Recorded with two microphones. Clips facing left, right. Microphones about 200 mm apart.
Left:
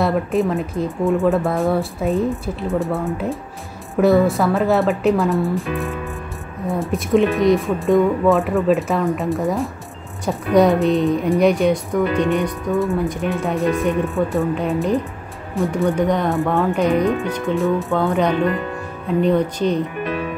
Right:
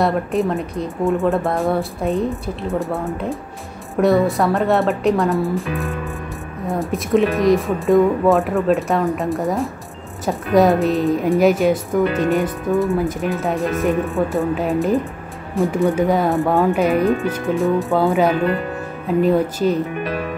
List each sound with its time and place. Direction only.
0.0 s speech: centre (ahead or behind)
6.7 s speech: centre (ahead or behind)
17.6 s speech: centre (ahead or behind)